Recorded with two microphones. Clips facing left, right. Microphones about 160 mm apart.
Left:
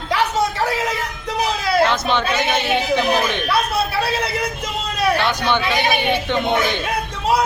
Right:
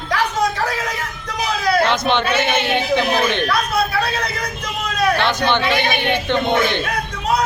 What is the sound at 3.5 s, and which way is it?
Speech, 30° left (ahead or behind).